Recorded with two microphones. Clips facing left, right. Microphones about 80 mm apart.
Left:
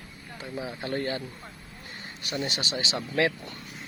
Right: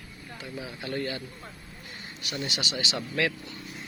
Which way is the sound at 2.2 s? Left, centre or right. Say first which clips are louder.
Left 2 dB; left.